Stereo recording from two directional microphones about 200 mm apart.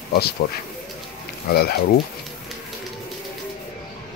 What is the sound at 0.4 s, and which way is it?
Speech, 40° left (ahead or behind).